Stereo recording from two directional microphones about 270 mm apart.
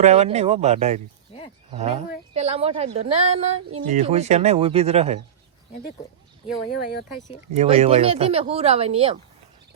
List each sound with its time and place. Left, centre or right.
0.0 s a woman's voice: right
1.3 s a sound: left
1.7 s a woman's voice: right
6.7 s speech: left
7.5 s a woman's voice: right